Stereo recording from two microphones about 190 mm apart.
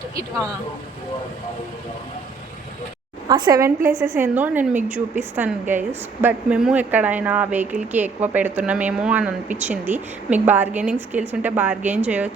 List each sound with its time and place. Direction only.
3.2 s a woman's voice: 20° right (ahead or behind)